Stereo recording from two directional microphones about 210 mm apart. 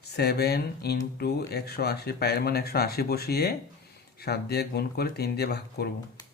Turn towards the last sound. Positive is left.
turn(degrees=50)  # may be behind; listen again after turning